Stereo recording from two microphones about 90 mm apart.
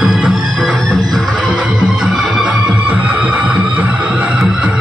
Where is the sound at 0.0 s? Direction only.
5° right (ahead or behind).